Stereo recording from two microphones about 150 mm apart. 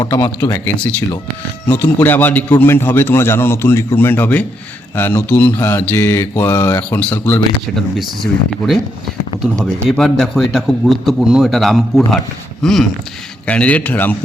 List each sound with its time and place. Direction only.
0.0 s a man's voice: 20° left (ahead or behind)
7.8 s a man's voice: centre (ahead or behind)
10.0 s a man's voice: centre (ahead or behind)